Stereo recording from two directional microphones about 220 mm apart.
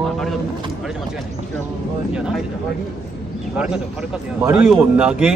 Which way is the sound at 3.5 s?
5° right (ahead or behind).